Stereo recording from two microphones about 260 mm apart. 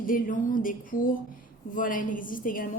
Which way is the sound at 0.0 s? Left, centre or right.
Left.